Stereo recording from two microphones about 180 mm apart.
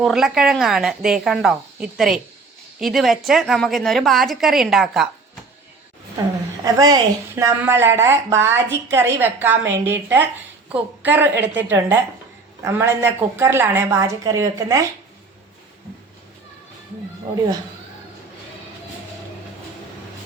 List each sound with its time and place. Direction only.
0.0 s a woman's voice: centre (ahead or behind)
6.7 s speech: 20° right (ahead or behind)